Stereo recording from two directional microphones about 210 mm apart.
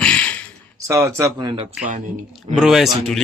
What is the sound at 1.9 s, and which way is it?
Speech, 40° right (ahead or behind).